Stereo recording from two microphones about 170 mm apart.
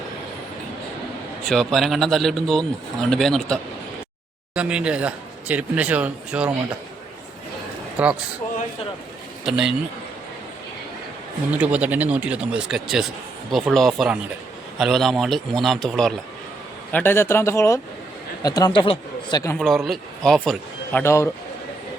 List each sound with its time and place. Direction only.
1.5 s speech: centre (ahead or behind)
9.4 s speech: 5° right (ahead or behind)
11.5 s speech: 10° right (ahead or behind); by 19.5 s 20° left (ahead or behind)
19.5 s speech: centre (ahead or behind)
21.0 s speech: 15° left (ahead or behind)